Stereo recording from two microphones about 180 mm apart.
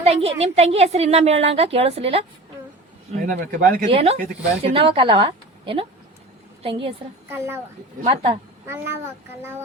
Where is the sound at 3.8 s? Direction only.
35° right (ahead or behind).